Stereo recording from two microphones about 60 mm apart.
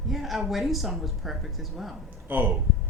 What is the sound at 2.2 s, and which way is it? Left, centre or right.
Speech, right.